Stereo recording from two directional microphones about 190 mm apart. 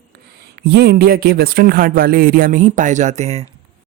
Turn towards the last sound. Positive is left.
turn(degrees=-35)  # may be behind; listen again after turning